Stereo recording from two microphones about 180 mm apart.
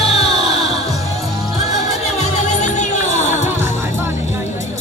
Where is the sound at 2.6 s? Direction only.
40° left (ahead or behind).